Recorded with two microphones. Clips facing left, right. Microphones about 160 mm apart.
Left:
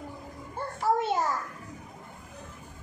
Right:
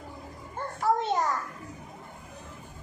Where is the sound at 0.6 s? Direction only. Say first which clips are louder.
Even; 10° left (ahead or behind).